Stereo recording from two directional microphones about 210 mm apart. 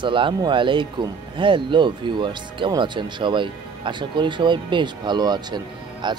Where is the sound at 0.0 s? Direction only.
25° right (ahead or behind).